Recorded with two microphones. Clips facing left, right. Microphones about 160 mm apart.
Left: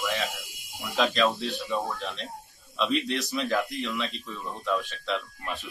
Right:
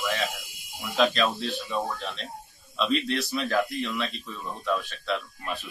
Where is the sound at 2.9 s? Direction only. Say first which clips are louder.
Right 2 dB; 15° left (ahead or behind).